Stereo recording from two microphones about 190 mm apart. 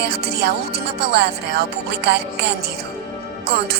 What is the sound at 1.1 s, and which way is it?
Music, 60° right (ahead or behind).